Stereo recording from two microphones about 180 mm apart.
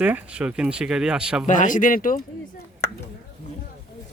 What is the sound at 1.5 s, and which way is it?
Speech, 45° left (ahead or behind).